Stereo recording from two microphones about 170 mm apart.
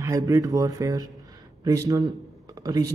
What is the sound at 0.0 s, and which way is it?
Speech, 20° right (ahead or behind).